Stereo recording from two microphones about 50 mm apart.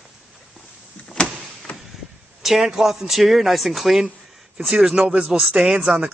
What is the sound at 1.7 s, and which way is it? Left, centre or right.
Vehicle, left.